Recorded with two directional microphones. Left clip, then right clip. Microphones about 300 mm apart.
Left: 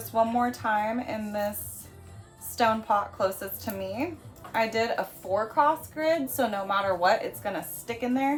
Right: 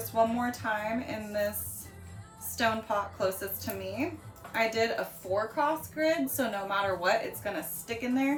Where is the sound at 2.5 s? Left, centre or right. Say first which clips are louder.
Left 5 dB; centre.